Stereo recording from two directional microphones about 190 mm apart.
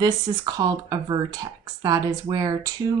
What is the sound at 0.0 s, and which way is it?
Speech, 20° right (ahead or behind).